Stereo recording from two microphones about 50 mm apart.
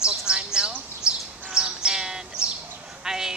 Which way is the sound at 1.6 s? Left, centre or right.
Centre.